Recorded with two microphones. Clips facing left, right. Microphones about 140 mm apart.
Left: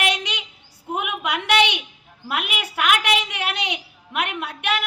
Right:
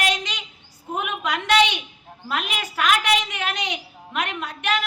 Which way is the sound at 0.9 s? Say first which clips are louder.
Even; 10° left (ahead or behind).